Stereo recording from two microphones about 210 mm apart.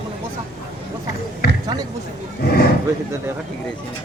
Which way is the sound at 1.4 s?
50° left (ahead or behind).